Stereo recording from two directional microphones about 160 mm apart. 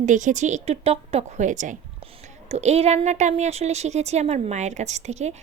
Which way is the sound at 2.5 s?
40° right (ahead or behind).